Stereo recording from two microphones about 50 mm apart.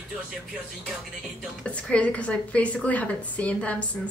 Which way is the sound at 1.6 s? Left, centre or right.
Left.